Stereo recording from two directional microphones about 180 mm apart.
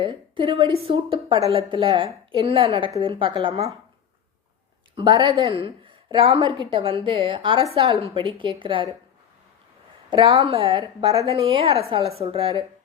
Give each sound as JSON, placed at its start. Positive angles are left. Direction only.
{"t": 0.0, "sound": "a woman's voice", "side_deg": -25}
{"t": 4.9, "sound": "a woman's voice", "side_deg": -25}
{"t": 10.1, "sound": "a woman's voice", "side_deg": -30}